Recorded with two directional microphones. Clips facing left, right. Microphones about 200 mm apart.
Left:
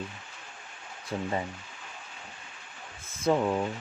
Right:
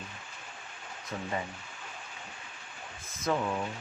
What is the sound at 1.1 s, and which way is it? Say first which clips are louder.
Speech: left 5 dB; 30° left (ahead or behind).